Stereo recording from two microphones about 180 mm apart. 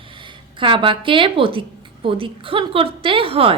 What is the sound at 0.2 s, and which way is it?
Speech, 30° right (ahead or behind).